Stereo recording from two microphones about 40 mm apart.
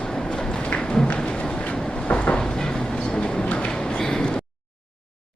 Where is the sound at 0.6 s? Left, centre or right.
Left.